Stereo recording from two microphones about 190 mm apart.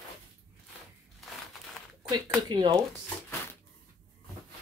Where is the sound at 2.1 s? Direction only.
20° right (ahead or behind).